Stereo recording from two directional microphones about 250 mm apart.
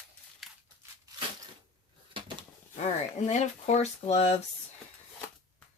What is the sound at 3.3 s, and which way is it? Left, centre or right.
Speech, left.